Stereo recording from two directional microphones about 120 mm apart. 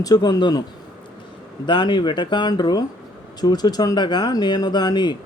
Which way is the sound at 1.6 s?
40° left (ahead or behind).